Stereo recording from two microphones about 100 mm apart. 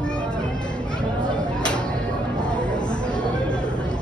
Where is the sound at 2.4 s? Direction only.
10° left (ahead or behind).